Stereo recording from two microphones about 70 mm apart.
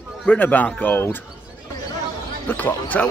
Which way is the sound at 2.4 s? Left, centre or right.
Left.